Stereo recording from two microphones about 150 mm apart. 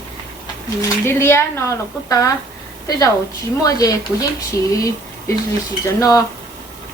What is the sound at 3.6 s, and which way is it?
Speech, 25° left (ahead or behind).